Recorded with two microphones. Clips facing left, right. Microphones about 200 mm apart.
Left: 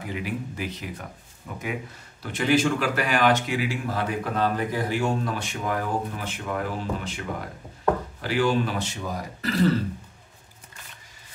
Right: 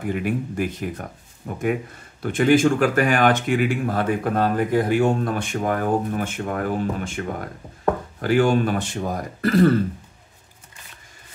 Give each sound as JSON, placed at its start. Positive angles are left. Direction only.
{"t": 0.0, "sound": "speech", "side_deg": -50}